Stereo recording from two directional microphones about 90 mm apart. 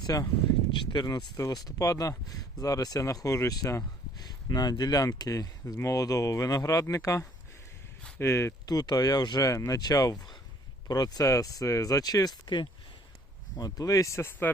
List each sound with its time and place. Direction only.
0.0 s speech: 40° left (ahead or behind)
8.6 s speech: 50° left (ahead or behind)
9.8 s speech: 45° left (ahead or behind); by 14.5 s 25° left (ahead or behind)